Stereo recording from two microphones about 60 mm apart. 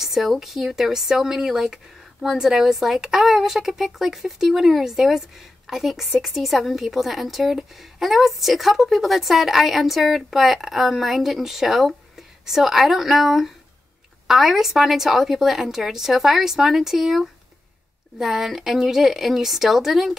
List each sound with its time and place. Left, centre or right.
0.0 s a woman's voice: centre